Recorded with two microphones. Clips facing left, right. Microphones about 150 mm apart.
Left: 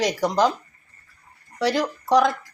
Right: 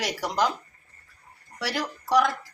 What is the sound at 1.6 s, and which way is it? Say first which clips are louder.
Speech: left 8 dB; 20° left (ahead or behind).